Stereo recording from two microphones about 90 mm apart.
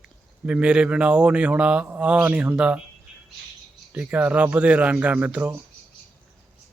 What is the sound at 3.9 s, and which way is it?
Speech, 15° right (ahead or behind).